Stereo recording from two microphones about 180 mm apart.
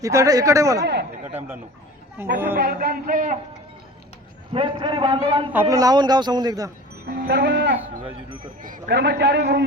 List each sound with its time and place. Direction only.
0.0 s speech: 15° right (ahead or behind)
2.6 s a man's voice: 55° right (ahead or behind)
4.5 s a man's voice: 30° right (ahead or behind)
5.5 s a man's voice: 15° right (ahead or behind)
7.0 s music: 65° right (ahead or behind)
8.9 s a man's voice: 70° right (ahead or behind)